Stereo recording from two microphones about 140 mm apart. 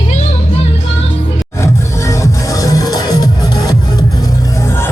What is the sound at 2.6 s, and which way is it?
Music, 25° left (ahead or behind).